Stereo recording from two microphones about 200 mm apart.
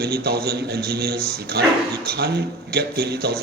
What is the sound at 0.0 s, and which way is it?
A man's voice, 50° right (ahead or behind).